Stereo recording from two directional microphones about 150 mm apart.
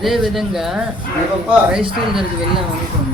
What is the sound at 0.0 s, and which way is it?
Speech, centre (ahead or behind).